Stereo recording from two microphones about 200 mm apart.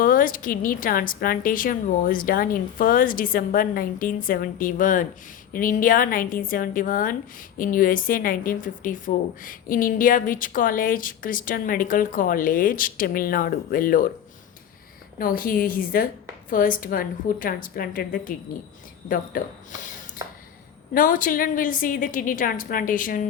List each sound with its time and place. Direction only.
0.0 s a woman's voice: 45° left (ahead or behind)
15.2 s a woman's voice: 45° left (ahead or behind)
20.2 s a sound: 20° right (ahead or behind)
20.9 s a woman's voice: 45° left (ahead or behind)